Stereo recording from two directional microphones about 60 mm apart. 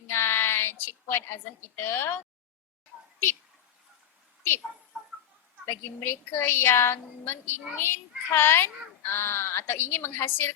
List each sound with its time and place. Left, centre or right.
0.1 s child singing: left
1.7 s a woman's voice: left
5.6 s a woman's voice: left